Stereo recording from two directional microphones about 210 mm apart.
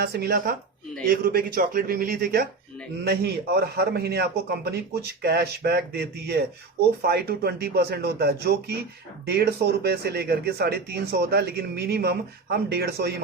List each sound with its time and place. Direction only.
0.0 s speech: 50° right (ahead or behind)